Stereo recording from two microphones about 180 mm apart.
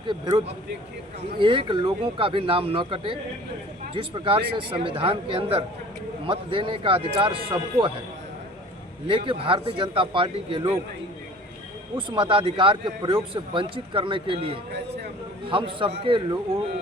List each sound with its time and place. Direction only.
0.1 s speech: 25° right (ahead or behind)
9.0 s speech: 30° right (ahead or behind)
11.9 s speech: 25° right (ahead or behind)